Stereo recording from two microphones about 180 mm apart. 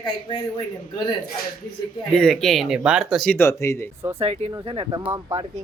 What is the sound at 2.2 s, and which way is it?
Speech, centre (ahead or behind).